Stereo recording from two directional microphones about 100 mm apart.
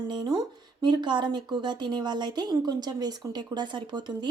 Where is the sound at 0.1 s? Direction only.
45° right (ahead or behind).